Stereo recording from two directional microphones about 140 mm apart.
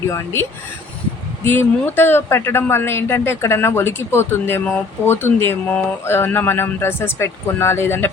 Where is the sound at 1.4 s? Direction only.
15° left (ahead or behind).